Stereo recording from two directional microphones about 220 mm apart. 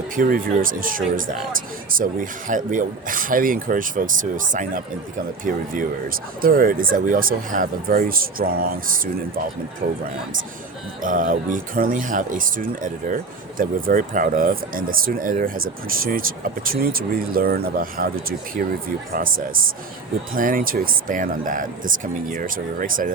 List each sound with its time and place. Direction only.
0.2 s speech: 40° right (ahead or behind)
11.0 s speech: 35° right (ahead or behind)